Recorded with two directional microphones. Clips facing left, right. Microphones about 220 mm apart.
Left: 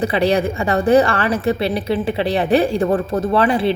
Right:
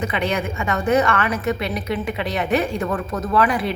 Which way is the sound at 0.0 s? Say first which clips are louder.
Left 6 dB; 35° left (ahead or behind).